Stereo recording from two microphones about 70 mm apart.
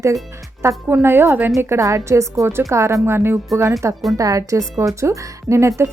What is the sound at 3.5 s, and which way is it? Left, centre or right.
Speech, right.